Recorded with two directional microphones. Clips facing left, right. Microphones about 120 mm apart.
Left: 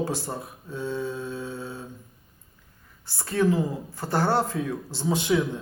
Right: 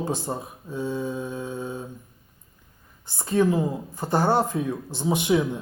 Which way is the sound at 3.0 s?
20° right (ahead or behind).